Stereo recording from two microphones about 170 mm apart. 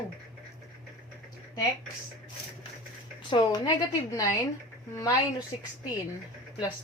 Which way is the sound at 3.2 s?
30° left (ahead or behind).